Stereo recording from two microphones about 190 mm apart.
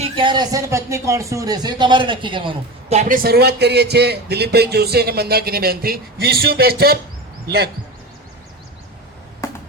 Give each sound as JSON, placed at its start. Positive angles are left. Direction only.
{"t": 0.0, "sound": "speech", "side_deg": -25}
{"t": 3.2, "sound": "speech", "side_deg": -55}
{"t": 9.4, "sound": "music", "side_deg": 15}